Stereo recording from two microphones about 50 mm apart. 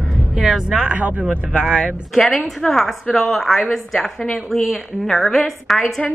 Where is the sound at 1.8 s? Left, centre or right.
Centre.